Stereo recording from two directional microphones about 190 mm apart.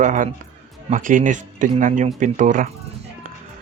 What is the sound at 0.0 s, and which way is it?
Speech, 45° right (ahead or behind).